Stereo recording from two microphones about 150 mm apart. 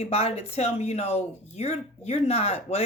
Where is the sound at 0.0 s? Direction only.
45° left (ahead or behind).